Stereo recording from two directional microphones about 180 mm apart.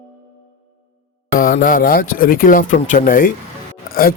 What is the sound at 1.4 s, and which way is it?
A man's voice, 50° left (ahead or behind).